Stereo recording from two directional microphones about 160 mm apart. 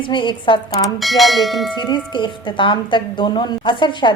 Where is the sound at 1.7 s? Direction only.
30° left (ahead or behind).